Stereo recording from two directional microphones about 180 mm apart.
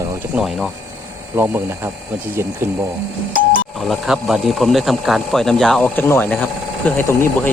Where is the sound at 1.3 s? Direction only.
10° right (ahead or behind).